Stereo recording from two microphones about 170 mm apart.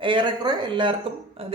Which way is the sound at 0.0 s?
30° right (ahead or behind).